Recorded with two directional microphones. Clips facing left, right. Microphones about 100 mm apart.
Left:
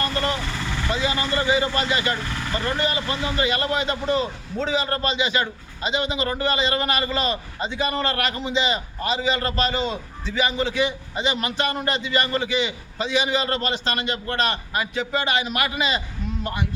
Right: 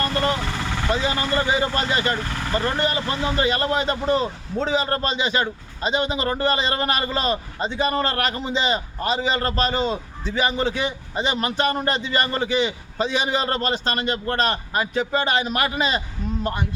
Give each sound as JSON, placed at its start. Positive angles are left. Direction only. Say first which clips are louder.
{"t": 0.0, "sound": "vehicle", "louder": "right 2 dB", "side_deg": -35}
{"t": 0.9, "sound": "a man's voice", "louder": "right 1 dB", "side_deg": -35}